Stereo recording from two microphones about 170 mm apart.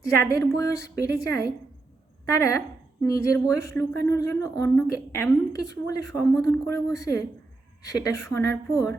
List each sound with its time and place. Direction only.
0.0 s a woman's voice: 20° left (ahead or behind)